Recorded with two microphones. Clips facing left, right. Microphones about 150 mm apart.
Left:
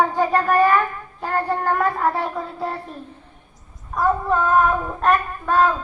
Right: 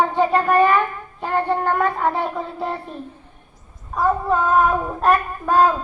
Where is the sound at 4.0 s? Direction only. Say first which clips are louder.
Right 1 dB; 5° right (ahead or behind).